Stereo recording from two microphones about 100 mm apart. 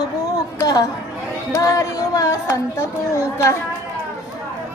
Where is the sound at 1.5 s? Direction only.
30° left (ahead or behind).